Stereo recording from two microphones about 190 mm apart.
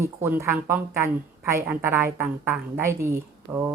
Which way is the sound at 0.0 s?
15° right (ahead or behind).